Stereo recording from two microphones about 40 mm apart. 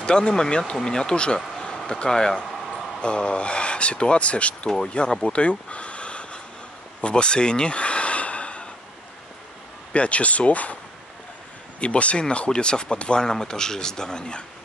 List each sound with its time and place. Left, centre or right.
0.0 s speech: left
5.2 s a sound: left
9.9 s speech: left
11.8 s speech: left